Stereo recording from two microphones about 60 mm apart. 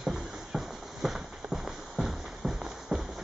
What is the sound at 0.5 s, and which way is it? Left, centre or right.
Clip-clop, centre.